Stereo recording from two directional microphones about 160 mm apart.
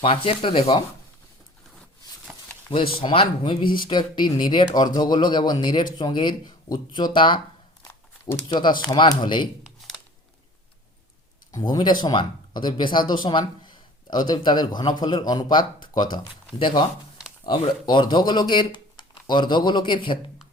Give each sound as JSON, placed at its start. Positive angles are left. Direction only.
{"t": 0.0, "sound": "speech", "side_deg": 35}
{"t": 3.0, "sound": "a man's voice", "side_deg": 30}
{"t": 8.4, "sound": "a man's voice", "side_deg": 30}
{"t": 11.5, "sound": "a man's voice", "side_deg": 25}